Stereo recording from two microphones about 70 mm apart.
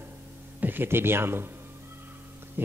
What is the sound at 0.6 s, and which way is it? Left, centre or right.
Speech, right.